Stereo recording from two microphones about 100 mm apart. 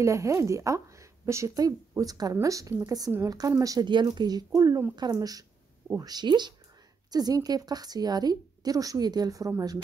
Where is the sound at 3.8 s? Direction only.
50° right (ahead or behind).